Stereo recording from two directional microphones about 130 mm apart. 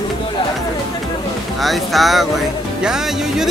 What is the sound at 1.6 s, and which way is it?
Speech, centre (ahead or behind).